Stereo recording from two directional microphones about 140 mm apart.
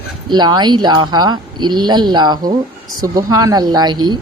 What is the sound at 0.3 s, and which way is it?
Speech, 30° right (ahead or behind).